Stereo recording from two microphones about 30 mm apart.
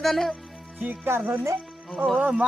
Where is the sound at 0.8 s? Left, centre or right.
Right.